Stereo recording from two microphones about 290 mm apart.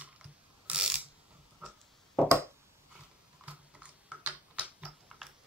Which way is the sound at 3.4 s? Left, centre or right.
Centre.